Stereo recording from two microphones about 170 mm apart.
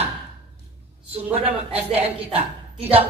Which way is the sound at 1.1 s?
35° right (ahead or behind).